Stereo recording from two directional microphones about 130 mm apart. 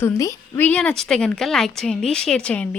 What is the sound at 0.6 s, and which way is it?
Speech, 10° left (ahead or behind).